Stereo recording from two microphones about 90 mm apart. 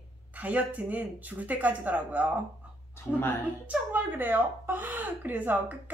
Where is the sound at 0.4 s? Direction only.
15° right (ahead or behind).